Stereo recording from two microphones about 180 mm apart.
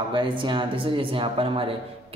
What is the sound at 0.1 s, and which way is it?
Speech, 30° right (ahead or behind).